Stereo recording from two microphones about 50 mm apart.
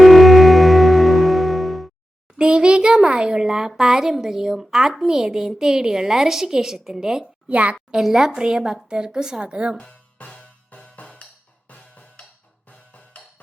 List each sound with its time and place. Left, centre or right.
0.0 s music: centre
2.4 s a child's voice: centre
7.4 s a woman's voice: right
7.9 s a woman's voice: centre
9.7 s music: left